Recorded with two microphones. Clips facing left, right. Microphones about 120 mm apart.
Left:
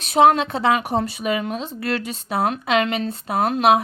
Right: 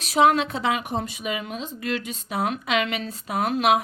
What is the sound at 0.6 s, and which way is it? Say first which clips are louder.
Speech: left 6 dB; 40° left (ahead or behind).